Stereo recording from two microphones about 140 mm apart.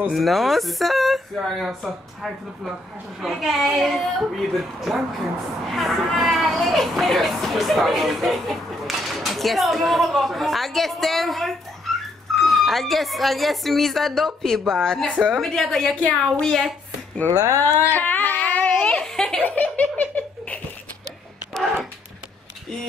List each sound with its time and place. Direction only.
0.0 s speech: centre (ahead or behind)
17.3 s speech: 25° right (ahead or behind)
17.8 s giggle: 10° left (ahead or behind)